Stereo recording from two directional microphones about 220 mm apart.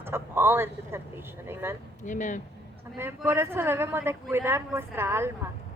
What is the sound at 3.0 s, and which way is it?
Speech, 10° right (ahead or behind).